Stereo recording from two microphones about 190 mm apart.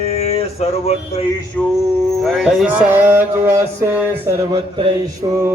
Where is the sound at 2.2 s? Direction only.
Centre (ahead or behind).